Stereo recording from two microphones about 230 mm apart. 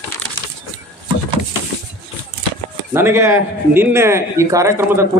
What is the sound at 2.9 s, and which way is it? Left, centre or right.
Speech, centre.